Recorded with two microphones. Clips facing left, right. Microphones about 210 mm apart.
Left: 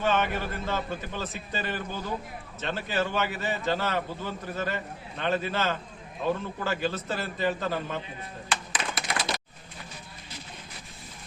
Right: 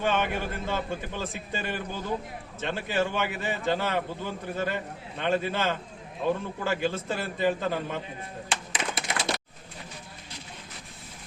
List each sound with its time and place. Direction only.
0.0 s a man's voice: 15° right (ahead or behind)
8.4 s music: 25° right (ahead or behind)